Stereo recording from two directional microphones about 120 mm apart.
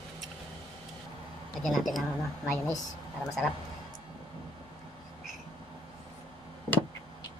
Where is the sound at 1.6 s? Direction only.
Centre (ahead or behind).